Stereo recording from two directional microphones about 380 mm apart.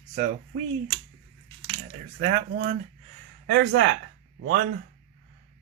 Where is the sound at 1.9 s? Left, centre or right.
Right.